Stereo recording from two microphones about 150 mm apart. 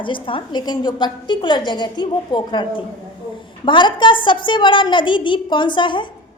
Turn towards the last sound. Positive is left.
turn(degrees=30)  # may be behind; listen again after turning